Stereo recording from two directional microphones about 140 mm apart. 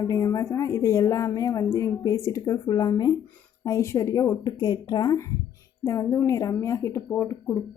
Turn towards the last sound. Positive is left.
turn(degrees=15)  # may be behind; listen again after turning